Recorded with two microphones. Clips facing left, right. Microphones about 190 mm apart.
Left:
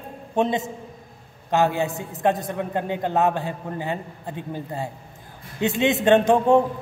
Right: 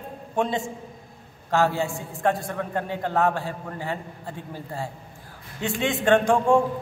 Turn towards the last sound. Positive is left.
turn(degrees=20)  # may be behind; listen again after turning